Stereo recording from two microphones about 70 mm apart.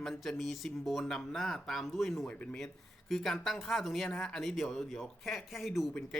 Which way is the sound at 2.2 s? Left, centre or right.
Centre.